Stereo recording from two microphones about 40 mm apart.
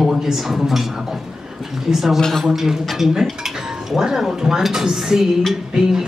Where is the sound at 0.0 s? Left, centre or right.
Centre.